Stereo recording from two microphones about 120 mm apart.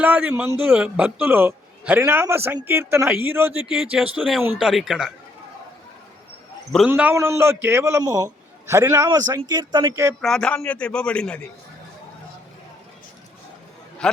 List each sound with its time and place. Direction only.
0.0 s a man's voice: 10° right (ahead or behind)
4.2 s speech: centre (ahead or behind)
6.8 s a man's voice: 15° right (ahead or behind)
10.2 s a man's voice: 5° left (ahead or behind)
14.0 s speech: 5° left (ahead or behind)